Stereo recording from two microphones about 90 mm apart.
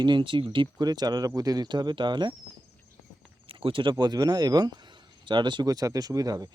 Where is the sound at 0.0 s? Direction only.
65° right (ahead or behind).